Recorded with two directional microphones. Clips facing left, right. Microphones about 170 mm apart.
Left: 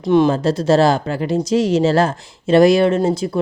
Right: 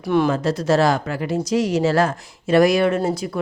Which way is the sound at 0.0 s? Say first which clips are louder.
Left 4 dB; 20° left (ahead or behind).